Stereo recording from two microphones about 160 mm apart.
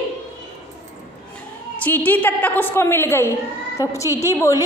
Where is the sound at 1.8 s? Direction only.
10° left (ahead or behind).